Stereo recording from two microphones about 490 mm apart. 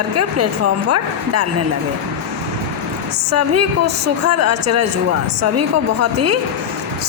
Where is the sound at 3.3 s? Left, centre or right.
Right.